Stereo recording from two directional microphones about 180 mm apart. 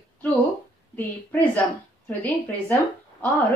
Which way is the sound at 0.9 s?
10° left (ahead or behind).